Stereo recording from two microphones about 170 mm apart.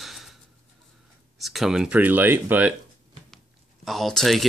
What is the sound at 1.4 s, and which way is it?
Speech, centre (ahead or behind).